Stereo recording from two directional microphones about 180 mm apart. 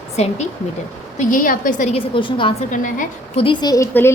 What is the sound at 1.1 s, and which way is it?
Speech, 50° left (ahead or behind).